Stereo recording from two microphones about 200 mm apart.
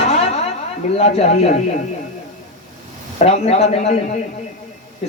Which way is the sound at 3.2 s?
30° left (ahead or behind).